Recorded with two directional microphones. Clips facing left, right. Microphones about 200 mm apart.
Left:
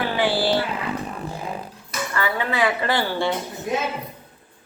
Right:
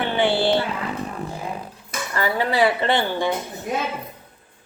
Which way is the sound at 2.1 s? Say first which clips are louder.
Right 3 dB; 35° right (ahead or behind).